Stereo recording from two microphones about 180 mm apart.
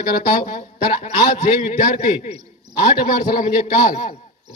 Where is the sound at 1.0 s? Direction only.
40° left (ahead or behind).